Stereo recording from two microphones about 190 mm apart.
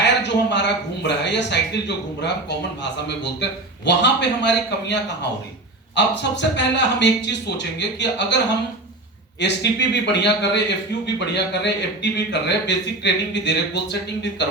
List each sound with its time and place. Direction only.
0.0 s a sound: 65° left (ahead or behind)
2.2 s a man's voice: 65° left (ahead or behind)
9.4 s a man's voice: 65° left (ahead or behind)